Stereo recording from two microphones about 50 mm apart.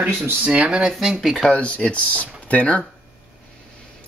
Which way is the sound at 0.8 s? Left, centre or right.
Centre.